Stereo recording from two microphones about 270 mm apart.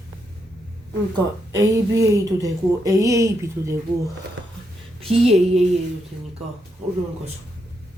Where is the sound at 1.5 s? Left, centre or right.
Centre.